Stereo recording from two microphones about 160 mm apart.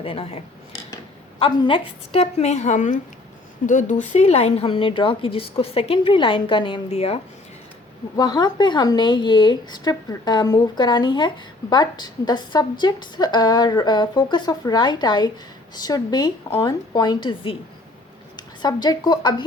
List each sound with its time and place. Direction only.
0.0 s a woman's voice: 35° left (ahead or behind)
8.1 s a woman's voice: 25° left (ahead or behind)